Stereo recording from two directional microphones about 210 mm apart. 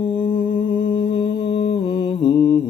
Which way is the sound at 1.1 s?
20° left (ahead or behind).